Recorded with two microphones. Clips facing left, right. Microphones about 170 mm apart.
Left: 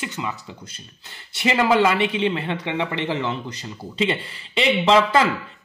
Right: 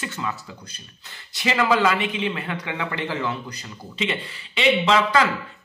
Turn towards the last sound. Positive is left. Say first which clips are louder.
# left 2 dB
turn(degrees=30)  # may be behind; listen again after turning